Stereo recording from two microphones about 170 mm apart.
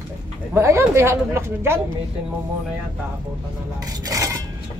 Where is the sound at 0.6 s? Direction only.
15° right (ahead or behind).